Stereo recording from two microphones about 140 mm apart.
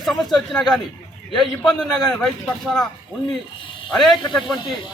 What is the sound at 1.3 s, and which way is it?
A man's voice, centre (ahead or behind).